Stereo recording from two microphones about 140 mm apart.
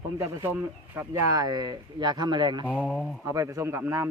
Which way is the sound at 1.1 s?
25° right (ahead or behind).